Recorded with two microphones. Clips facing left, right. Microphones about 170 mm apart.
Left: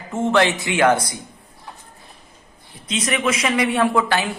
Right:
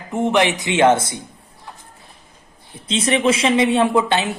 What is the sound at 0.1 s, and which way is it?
Speech, 15° right (ahead or behind).